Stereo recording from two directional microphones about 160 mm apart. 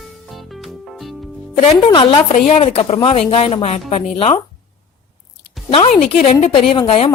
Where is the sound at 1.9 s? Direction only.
30° left (ahead or behind).